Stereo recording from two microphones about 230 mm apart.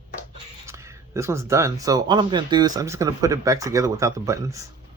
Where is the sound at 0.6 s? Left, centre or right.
Centre.